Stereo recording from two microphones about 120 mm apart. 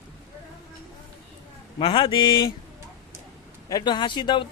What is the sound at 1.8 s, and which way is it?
Speech, 45° left (ahead or behind).